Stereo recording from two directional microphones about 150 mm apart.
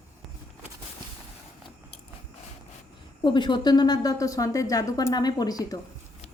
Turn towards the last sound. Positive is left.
turn(degrees=25)  # may be behind; listen again after turning